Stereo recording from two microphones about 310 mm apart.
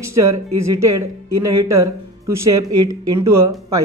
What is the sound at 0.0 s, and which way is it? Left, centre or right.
Speech, centre.